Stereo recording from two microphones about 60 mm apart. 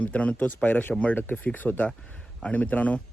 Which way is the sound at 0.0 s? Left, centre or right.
Left.